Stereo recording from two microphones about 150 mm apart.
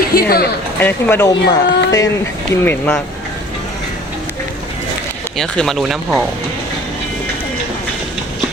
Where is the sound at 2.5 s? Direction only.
10° left (ahead or behind).